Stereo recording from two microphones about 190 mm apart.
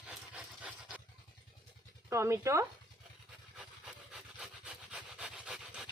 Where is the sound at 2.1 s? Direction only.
15° right (ahead or behind).